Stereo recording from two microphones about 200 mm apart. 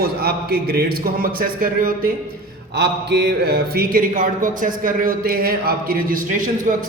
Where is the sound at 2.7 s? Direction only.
55° right (ahead or behind); by 6.8 s 40° right (ahead or behind).